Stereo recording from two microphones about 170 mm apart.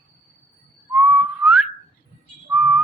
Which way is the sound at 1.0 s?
Centre (ahead or behind).